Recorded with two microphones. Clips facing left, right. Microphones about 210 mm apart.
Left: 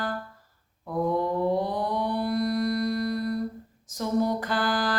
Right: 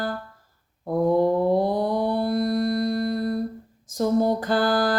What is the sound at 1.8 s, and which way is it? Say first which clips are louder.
Mantra: right 5 dB; 30° right (ahead or behind).